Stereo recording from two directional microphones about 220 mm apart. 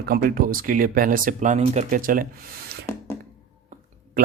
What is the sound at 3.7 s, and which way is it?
Clicking, 35° right (ahead or behind).